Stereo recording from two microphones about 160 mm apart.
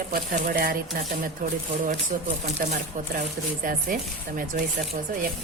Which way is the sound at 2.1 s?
55° right (ahead or behind).